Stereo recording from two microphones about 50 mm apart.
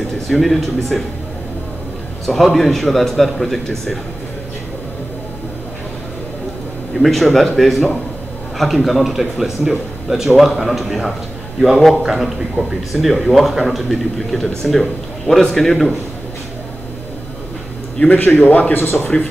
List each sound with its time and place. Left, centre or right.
0.3 s a man's voice: centre
2.2 s a man's voice: centre
7.0 s a man's voice: centre
17.9 s speech: left